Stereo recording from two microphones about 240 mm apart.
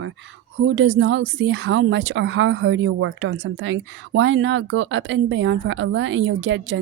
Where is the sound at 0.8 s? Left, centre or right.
Right.